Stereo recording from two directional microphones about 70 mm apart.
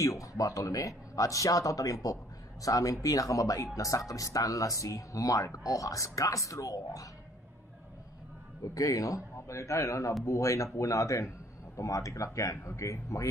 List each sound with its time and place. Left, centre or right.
0.0 s speech: left
8.7 s speech: left